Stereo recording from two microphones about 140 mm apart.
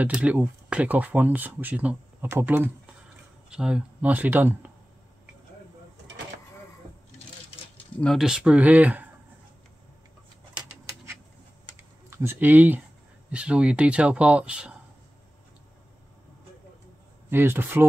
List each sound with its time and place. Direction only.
0.0 s speech: 10° right (ahead or behind)
8.0 s speech: centre (ahead or behind)
12.1 s speech: 15° right (ahead or behind)
17.3 s speech: 15° right (ahead or behind)